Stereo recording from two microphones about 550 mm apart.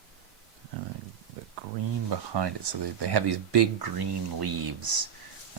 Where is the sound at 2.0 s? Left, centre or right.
Right.